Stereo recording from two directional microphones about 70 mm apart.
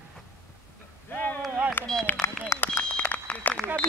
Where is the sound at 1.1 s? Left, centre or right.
Left.